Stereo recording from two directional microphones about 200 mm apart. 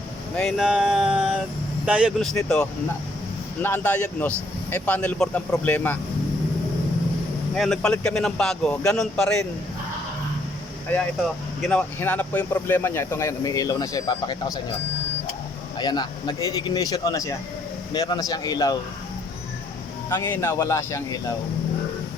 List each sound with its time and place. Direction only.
0.3 s a man's voice: centre (ahead or behind)
7.5 s a man's voice: centre (ahead or behind)
10.9 s speech: 10° left (ahead or behind)
15.8 s speech: 20° left (ahead or behind)
20.1 s speech: 10° left (ahead or behind)